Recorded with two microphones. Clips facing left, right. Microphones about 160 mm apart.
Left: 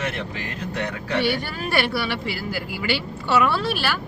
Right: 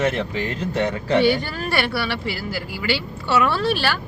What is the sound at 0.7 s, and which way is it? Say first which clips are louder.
Speech: right 6 dB; 25° right (ahead or behind).